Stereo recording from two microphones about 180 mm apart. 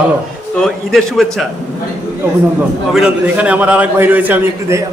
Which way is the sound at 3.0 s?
5° right (ahead or behind).